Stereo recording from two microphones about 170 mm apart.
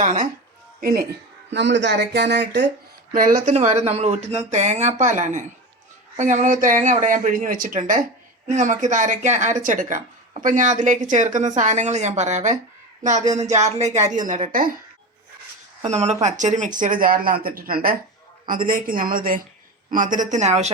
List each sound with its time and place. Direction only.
0.0 s speech: 50° right (ahead or behind)
1.5 s speech: 90° right
3.1 s speech: 55° right (ahead or behind)
15.8 s a woman's voice: 40° right (ahead or behind)